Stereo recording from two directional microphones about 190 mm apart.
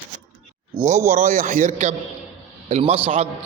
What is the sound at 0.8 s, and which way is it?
A man's voice, 40° right (ahead or behind).